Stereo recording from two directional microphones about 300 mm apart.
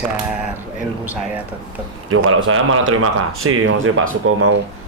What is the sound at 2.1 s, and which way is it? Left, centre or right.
A man's voice, right.